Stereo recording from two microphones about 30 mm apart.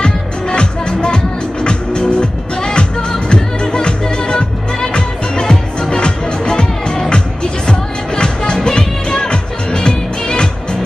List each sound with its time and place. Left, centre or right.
0.0 s music: left